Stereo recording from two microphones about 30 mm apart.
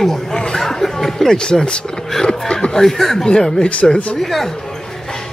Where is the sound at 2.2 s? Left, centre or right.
Left.